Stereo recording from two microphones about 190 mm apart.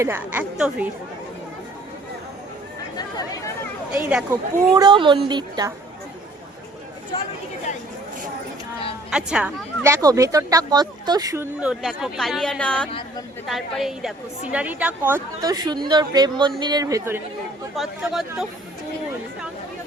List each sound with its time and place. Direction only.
0.0 s speech: 10° right (ahead or behind)
3.9 s speech: 10° right (ahead or behind)
4.7 s speech: 20° right (ahead or behind)
7.1 s speech: 25° left (ahead or behind)
9.0 s speech: 5° right (ahead or behind)
11.6 s speech: centre (ahead or behind); by 17.2 s 15° right (ahead or behind)
17.7 s speech: centre (ahead or behind)